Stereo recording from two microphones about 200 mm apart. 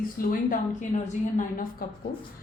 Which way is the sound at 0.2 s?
45° left (ahead or behind).